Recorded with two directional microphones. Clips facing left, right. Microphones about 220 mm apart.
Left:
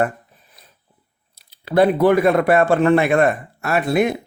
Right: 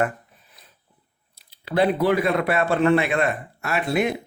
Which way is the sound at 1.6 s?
45° left (ahead or behind).